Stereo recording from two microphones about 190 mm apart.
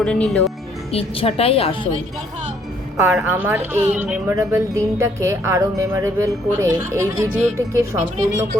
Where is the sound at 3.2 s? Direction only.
10° right (ahead or behind).